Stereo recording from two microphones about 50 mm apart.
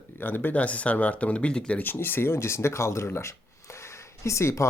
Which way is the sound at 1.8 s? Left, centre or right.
Left.